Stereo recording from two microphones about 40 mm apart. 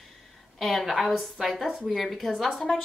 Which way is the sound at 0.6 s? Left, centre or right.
Centre.